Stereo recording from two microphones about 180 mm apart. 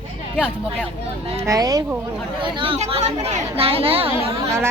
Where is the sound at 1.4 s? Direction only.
20° right (ahead or behind).